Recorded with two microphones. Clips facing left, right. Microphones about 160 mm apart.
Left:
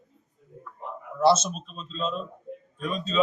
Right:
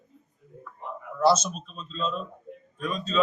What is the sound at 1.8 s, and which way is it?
Speech, 30° left (ahead or behind).